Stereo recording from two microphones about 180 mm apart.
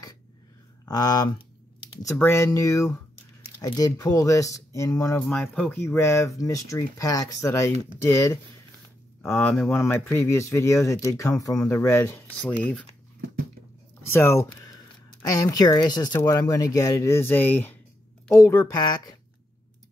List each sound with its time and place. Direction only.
0.8 s speech: 20° left (ahead or behind)
5.2 s speech: 5° left (ahead or behind)
14.1 s speech: 15° left (ahead or behind)